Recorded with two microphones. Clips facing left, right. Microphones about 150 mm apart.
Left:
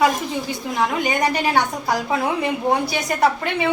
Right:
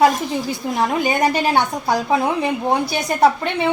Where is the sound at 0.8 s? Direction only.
30° right (ahead or behind).